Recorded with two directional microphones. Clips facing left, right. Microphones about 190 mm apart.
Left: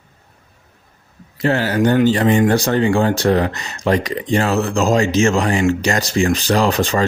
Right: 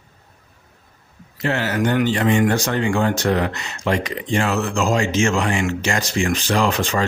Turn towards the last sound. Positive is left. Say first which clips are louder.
# left 3 dB
turn(degrees=35)  # may be behind; listen again after turning